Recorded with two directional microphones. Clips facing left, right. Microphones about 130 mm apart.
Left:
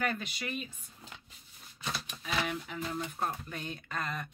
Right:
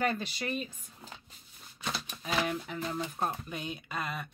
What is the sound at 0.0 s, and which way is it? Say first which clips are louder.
Speech: right 3 dB; 30° right (ahead or behind).